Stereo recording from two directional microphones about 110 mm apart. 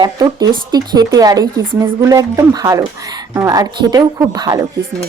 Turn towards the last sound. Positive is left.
turn(degrees=-35)  # may be behind; listen again after turning